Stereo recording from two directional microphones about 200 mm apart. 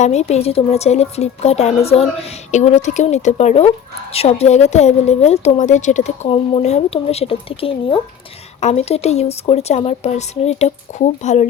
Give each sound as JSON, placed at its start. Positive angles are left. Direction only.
{"t": 0.0, "sound": "a woman's voice", "side_deg": 35}